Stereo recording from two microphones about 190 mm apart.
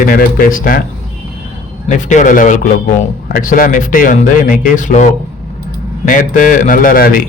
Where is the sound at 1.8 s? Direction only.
40° left (ahead or behind).